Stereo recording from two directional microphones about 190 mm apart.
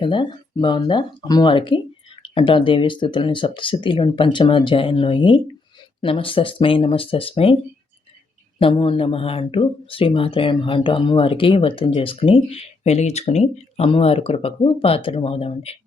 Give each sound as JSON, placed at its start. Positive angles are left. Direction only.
{"t": 0.0, "sound": "speech", "side_deg": 25}
{"t": 8.5, "sound": "speech", "side_deg": 30}